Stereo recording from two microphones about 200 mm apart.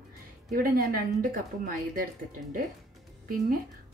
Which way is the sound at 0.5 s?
45° right (ahead or behind).